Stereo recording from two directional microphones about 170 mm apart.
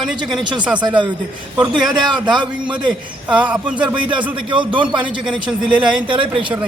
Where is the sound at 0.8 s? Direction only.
25° right (ahead or behind).